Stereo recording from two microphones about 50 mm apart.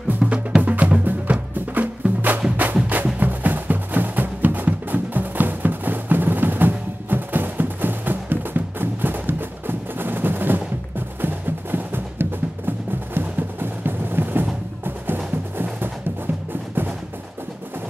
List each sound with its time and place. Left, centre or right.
0.2 s music: centre
0.6 s music: right